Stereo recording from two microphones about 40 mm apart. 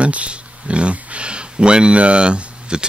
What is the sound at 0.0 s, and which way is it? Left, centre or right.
Speech, right.